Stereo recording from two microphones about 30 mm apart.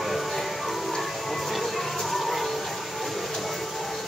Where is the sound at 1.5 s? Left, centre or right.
Centre.